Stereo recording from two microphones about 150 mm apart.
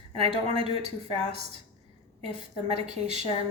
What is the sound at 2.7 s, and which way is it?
Speech, 45° right (ahead or behind).